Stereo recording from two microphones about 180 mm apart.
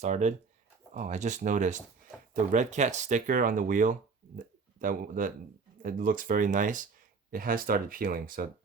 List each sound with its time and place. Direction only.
0.0 s speech: 40° right (ahead or behind)